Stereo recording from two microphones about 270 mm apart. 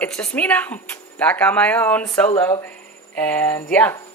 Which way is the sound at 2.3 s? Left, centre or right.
Centre.